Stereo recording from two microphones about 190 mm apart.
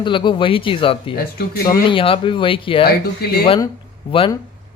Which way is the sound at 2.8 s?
55° left (ahead or behind).